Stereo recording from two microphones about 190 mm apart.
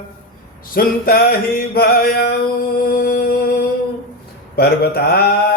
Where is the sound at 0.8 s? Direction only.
50° left (ahead or behind).